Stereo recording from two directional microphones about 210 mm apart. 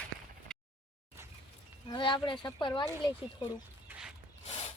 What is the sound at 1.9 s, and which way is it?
Speech, 20° left (ahead or behind).